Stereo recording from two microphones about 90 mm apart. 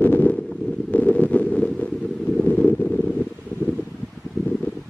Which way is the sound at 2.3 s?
15° left (ahead or behind).